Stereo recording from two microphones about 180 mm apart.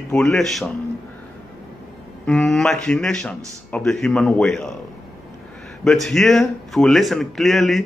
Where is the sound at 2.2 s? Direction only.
Centre (ahead or behind).